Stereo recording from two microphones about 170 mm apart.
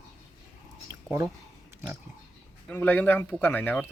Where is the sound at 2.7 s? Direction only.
10° left (ahead or behind).